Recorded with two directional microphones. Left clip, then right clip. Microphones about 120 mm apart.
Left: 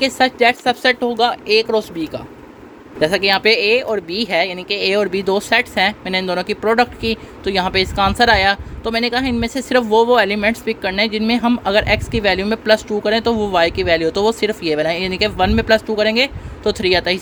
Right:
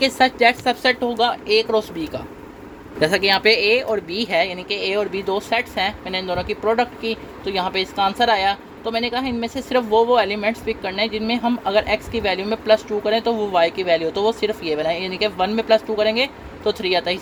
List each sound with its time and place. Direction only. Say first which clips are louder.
0.0 s speech: left 1 dB; 25° left (ahead or behind); by 2.0 s 45° left (ahead or behind)
3.0 s speech: left 2 dB; 20° left (ahead or behind)